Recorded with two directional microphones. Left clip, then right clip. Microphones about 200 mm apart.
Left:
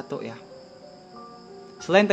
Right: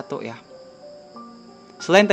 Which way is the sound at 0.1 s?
15° right (ahead or behind).